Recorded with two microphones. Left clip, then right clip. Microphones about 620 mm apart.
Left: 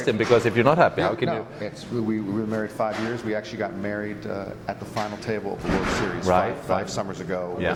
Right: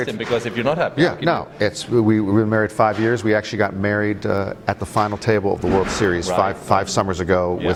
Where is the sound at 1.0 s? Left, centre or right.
Right.